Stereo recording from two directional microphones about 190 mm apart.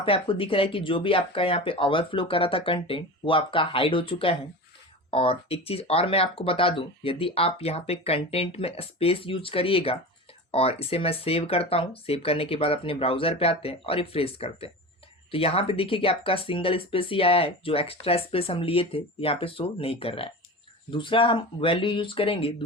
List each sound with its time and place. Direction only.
0.0 s speech: 30° left (ahead or behind)